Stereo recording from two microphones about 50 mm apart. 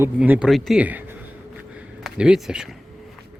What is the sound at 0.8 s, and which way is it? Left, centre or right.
Speech, right.